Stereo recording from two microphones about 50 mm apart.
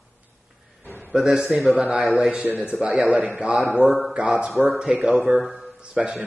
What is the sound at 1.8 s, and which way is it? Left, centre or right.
A man's voice, right.